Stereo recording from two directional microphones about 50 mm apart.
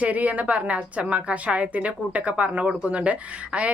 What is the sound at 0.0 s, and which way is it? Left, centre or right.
A woman's voice, right.